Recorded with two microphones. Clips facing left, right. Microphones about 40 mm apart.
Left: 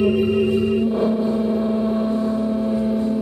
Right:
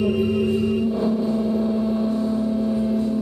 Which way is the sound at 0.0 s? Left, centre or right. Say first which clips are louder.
Left 3 dB; left.